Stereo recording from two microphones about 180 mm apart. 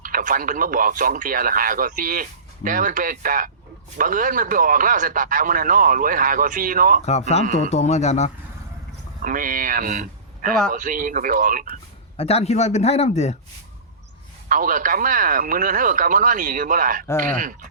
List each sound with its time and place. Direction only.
0.0 s a man's voice: 50° right (ahead or behind)
7.0 s a man's voice: 35° left (ahead or behind)
9.2 s a man's voice: 50° right (ahead or behind)
12.1 s a man's voice: 35° left (ahead or behind)
14.5 s a man's voice: 50° right (ahead or behind)